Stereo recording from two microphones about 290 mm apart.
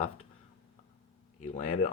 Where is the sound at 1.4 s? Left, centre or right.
Left.